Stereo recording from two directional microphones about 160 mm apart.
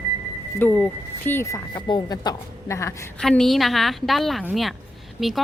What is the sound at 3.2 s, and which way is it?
Speech, 5° left (ahead or behind).